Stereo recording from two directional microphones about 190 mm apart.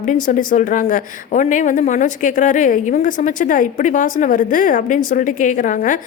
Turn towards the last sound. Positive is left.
turn(degrees=45)  # may be behind; listen again after turning